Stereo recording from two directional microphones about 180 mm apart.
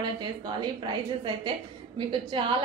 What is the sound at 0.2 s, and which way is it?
A woman's voice, 25° right (ahead or behind).